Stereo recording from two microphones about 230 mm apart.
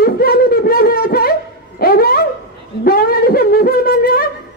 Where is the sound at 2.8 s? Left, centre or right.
Left.